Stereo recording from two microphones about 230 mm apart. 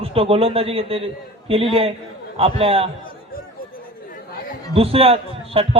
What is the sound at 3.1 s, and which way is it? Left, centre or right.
Chatter, left.